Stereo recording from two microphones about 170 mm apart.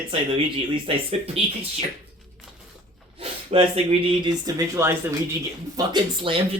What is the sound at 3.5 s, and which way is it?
Speech, 40° right (ahead or behind).